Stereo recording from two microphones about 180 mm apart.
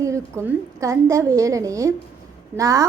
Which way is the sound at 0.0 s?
15° right (ahead or behind).